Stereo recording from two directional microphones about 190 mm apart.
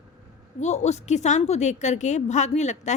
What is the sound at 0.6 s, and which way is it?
A woman's voice, 35° left (ahead or behind).